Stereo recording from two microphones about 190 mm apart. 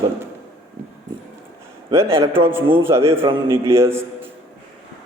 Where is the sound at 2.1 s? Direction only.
15° right (ahead or behind).